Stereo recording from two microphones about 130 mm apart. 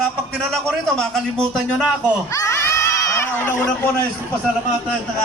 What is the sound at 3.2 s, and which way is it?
Speech, 15° left (ahead or behind).